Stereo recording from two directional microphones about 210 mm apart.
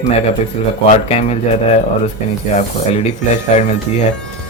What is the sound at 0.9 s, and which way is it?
Speech, 30° left (ahead or behind).